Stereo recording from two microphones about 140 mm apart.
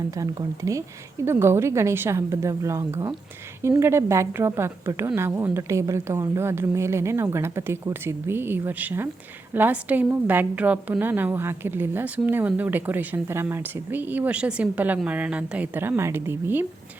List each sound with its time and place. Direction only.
0.2 s a woman's voice: 25° right (ahead or behind)